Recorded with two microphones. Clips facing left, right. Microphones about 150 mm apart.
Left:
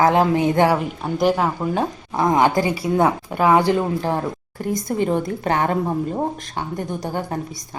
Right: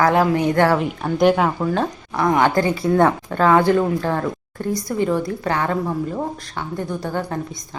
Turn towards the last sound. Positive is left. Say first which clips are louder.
# right 1 dB
turn(degrees=15)  # may be behind; listen again after turning